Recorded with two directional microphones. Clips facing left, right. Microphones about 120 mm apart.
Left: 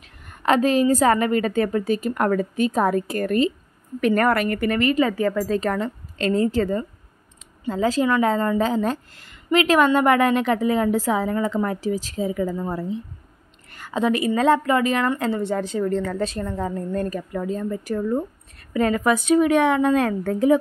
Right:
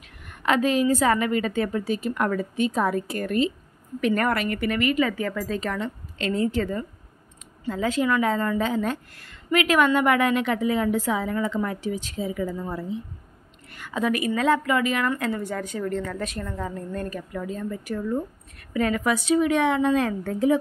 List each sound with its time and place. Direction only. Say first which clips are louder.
0.2 s a woman's voice: left 3 dB; 40° left (ahead or behind)
13.7 s a sound: left 1 dB; 40° left (ahead or behind)
13.9 s a woman's voice: left 4 dB; 25° left (ahead or behind); by 20.5 s 55° left (ahead or behind)